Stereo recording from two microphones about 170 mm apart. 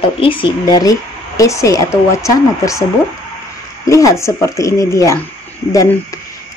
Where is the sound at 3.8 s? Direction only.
20° left (ahead or behind).